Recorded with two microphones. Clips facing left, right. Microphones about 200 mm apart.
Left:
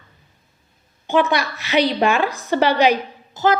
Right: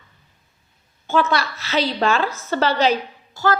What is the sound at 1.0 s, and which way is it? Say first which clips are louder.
A woman's voice: left 2 dB; 15° left (ahead or behind).